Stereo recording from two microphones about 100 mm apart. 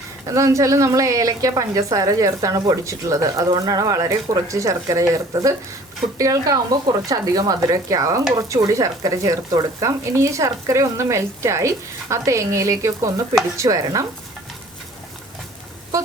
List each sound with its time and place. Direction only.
0.3 s speech: 30° right (ahead or behind)